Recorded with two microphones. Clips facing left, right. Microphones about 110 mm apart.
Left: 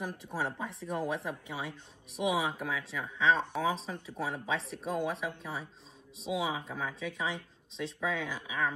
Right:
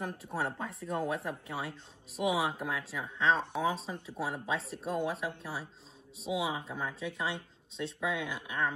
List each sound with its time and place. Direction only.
0.6 s speech: centre (ahead or behind)